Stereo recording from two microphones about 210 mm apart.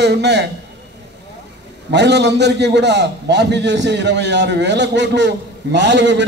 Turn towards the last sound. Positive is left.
turn(degrees=-60)  # may be behind; listen again after turning